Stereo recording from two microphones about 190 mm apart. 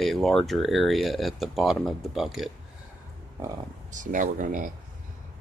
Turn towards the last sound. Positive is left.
turn(degrees=-45)  # may be behind; listen again after turning